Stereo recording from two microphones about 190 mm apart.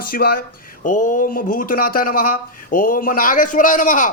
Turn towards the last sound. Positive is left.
turn(degrees=45)  # may be behind; listen again after turning